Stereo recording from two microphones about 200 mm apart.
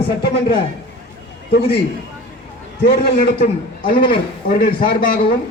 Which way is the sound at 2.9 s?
50° left (ahead or behind).